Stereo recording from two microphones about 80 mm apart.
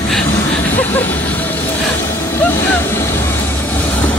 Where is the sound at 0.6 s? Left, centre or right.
Left.